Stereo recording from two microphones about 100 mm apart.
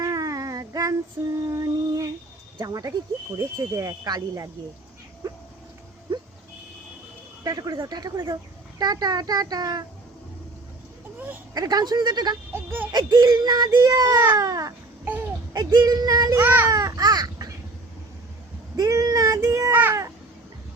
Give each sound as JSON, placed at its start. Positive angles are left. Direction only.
{"t": 0.0, "sound": "a sound", "side_deg": -40}
{"t": 2.6, "sound": "speech", "side_deg": -35}
{"t": 5.2, "sound": "a sound", "side_deg": -40}
{"t": 7.4, "sound": "a woman's voice", "side_deg": -40}
{"t": 11.5, "sound": "a woman's voice", "side_deg": -40}
{"t": 12.5, "sound": "speech", "side_deg": -20}
{"t": 12.9, "sound": "speech", "side_deg": -45}
{"t": 15.0, "sound": "babbling", "side_deg": -20}
{"t": 15.5, "sound": "speech", "side_deg": -40}
{"t": 16.4, "sound": "a child's voice", "side_deg": -20}
{"t": 16.7, "sound": "crow", "side_deg": -40}
{"t": 18.8, "sound": "child singing", "side_deg": -40}
{"t": 19.7, "sound": "a sound", "side_deg": -20}